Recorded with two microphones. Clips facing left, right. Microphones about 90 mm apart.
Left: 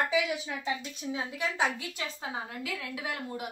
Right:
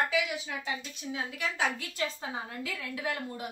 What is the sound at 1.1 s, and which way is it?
Speech, 25° left (ahead or behind).